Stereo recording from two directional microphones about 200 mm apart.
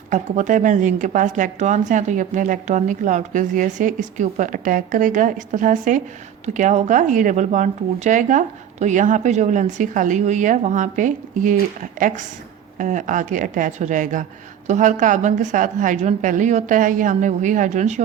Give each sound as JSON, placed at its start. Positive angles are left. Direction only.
{"t": 0.1, "sound": "a woman's voice", "side_deg": -40}